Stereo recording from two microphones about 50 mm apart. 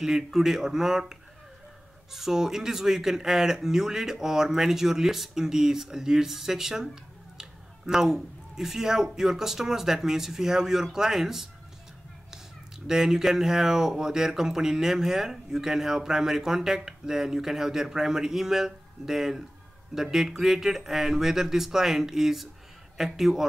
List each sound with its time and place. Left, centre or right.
0.0 s speech: centre
2.1 s speech: centre
12.8 s speech: centre